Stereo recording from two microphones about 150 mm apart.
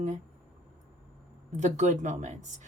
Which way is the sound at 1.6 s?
55° right (ahead or behind).